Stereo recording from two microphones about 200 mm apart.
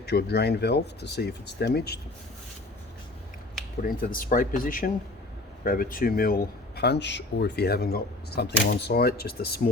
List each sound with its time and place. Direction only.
0.0 s speech: 55° left (ahead or behind)
3.8 s speech: 45° left (ahead or behind)